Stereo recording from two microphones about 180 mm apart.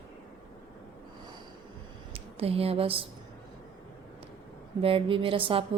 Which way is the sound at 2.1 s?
35° right (ahead or behind).